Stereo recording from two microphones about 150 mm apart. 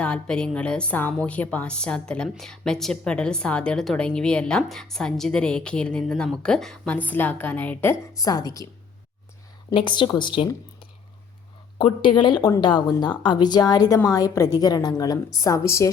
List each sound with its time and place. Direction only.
0.0 s a woman's voice: 5° left (ahead or behind)
8.2 s speech: 25° left (ahead or behind)
9.7 s a woman's voice: 30° left (ahead or behind)